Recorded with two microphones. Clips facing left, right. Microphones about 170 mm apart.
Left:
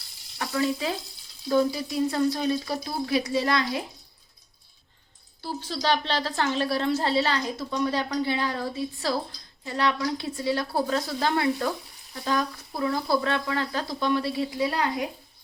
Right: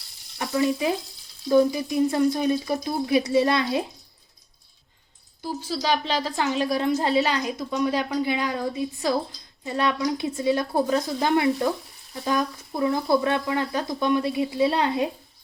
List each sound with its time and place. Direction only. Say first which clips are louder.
0.3 s speech: right 3 dB; 20° right (ahead or behind)
5.4 s a woman's voice: right 2 dB; 10° right (ahead or behind)